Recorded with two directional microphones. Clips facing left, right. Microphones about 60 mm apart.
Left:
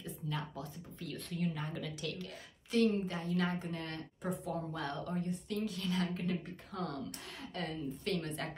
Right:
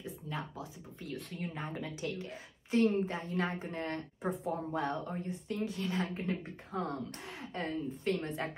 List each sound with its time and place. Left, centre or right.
0.0 s speech: centre
1.0 s speech: centre
1.5 s a woman's voice: right